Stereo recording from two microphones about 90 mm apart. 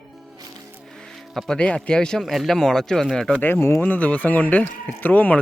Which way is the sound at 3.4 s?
25° left (ahead or behind).